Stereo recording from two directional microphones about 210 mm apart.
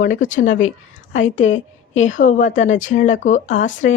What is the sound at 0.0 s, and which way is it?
Speech, 40° left (ahead or behind).